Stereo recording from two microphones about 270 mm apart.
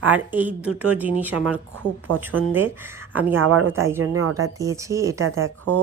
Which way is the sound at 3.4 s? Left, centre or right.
Right.